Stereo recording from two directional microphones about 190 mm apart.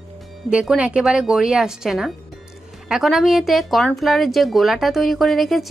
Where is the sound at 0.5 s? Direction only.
5° right (ahead or behind).